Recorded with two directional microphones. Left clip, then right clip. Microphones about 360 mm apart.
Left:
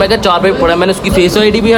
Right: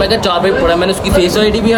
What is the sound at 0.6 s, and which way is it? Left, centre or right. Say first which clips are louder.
Speech: left 2 dB; centre.